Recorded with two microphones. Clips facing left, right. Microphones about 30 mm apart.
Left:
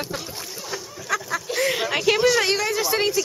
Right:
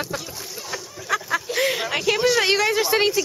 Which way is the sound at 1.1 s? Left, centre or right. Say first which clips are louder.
Right 1 dB; centre.